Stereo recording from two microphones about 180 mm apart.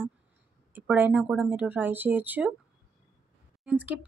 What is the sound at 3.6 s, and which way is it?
Speech, 10° right (ahead or behind).